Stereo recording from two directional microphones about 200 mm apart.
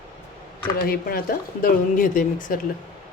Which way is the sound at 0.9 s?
50° left (ahead or behind).